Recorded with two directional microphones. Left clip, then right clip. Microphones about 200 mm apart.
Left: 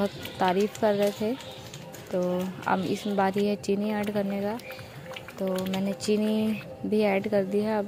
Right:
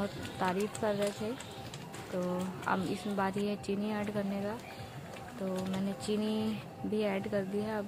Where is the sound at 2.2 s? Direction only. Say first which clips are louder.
Left 8 dB; 25° left (ahead or behind).